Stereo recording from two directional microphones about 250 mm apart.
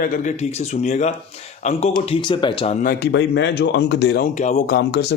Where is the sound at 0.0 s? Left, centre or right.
Left.